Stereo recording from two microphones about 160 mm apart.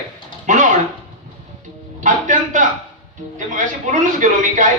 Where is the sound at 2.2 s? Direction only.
55° right (ahead or behind).